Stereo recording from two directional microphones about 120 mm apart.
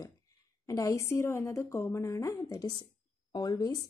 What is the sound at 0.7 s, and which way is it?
A woman's voice, 25° left (ahead or behind).